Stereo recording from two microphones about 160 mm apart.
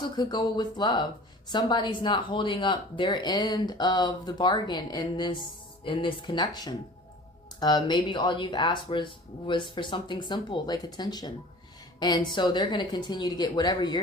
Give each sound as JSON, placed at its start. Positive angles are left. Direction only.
{"t": 0.0, "sound": "speech", "side_deg": 25}